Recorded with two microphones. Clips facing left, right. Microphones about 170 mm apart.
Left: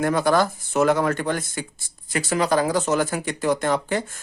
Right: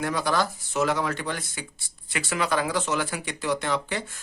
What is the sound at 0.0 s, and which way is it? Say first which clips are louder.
Speech: left 6 dB; 50° left (ahead or behind).